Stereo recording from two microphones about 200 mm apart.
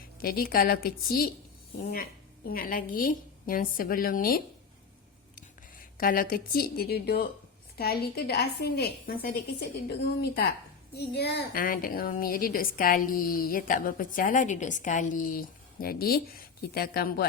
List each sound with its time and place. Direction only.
0.2 s a woman's voice: 50° left (ahead or behind)
6.0 s a woman's voice: 45° left (ahead or behind)